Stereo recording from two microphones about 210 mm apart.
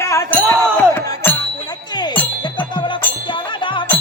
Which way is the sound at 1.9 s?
20° left (ahead or behind).